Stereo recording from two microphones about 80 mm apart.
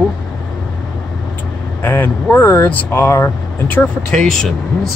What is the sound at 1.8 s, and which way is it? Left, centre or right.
Speech, left.